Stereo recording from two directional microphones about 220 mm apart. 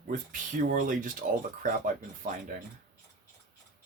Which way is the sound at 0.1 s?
35° right (ahead or behind).